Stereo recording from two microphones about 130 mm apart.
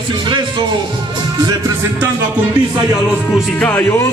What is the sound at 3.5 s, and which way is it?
Speech, 10° left (ahead or behind).